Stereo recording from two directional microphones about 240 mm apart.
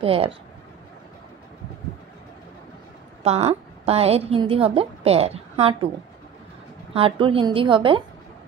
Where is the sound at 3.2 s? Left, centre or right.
Right.